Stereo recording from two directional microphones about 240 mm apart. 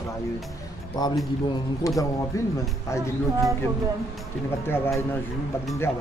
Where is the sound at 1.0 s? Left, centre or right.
Centre.